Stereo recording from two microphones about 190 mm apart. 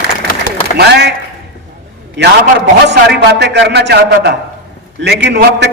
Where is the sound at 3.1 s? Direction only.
65° right (ahead or behind).